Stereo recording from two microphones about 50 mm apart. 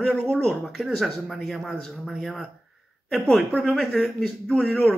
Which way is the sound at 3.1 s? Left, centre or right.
Centre.